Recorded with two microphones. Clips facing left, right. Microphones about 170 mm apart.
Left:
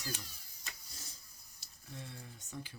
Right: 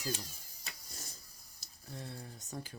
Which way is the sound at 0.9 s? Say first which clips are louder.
Right 4 dB; 45° right (ahead or behind).